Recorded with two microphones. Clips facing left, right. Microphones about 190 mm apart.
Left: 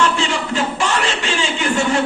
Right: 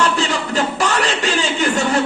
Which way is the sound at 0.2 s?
40° right (ahead or behind).